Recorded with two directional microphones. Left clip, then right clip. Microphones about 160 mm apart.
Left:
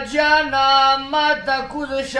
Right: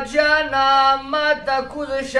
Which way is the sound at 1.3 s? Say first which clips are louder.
Even; 10° right (ahead or behind).